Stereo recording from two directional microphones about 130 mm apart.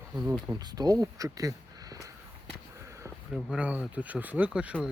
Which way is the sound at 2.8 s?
25° right (ahead or behind).